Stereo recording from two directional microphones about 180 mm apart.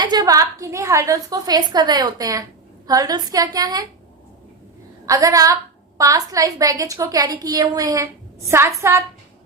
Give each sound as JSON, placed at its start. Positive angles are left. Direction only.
{"t": 0.0, "sound": "a woman's voice", "side_deg": -25}
{"t": 5.0, "sound": "a woman's voice", "side_deg": -20}